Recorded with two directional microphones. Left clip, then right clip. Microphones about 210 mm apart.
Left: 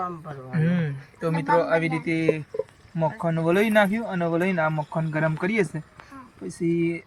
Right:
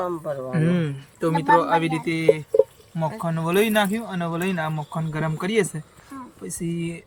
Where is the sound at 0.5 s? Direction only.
15° right (ahead or behind).